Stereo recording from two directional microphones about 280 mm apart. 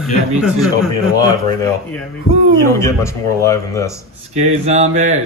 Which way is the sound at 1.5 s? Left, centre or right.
Centre.